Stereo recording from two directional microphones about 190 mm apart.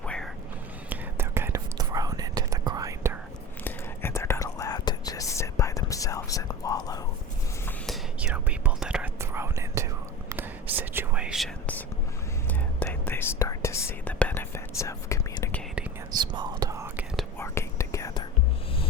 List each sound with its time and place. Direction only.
0.0 s whispering: 5° left (ahead or behind)
0.9 s whispering: 10° right (ahead or behind)
3.6 s whispering: 15° left (ahead or behind)
7.9 s whispering: 5° right (ahead or behind); by 15.6 s 15° left (ahead or behind)
16.1 s whispering: 25° right (ahead or behind)
17.3 s whispering: 15° left (ahead or behind)